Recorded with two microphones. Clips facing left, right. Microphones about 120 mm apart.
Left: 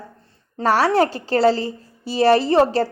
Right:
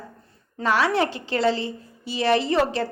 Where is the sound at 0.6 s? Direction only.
40° left (ahead or behind).